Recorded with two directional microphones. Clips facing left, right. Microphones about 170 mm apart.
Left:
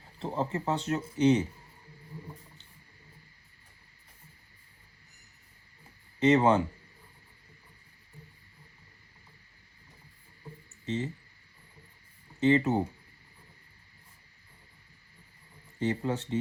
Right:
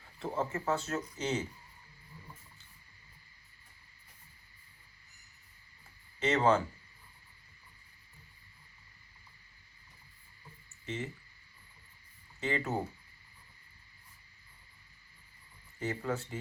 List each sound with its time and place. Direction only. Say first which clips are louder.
0.2 s speech: left 3 dB; 30° left (ahead or behind)
6.1 s speech: left 5 dB; 20° left (ahead or behind)
10.4 s a sound: left 6 dB; 35° left (ahead or behind)
12.4 s speech: left 11 dB; 25° left (ahead or behind)
15.8 s speech: left 5 dB; 25° left (ahead or behind)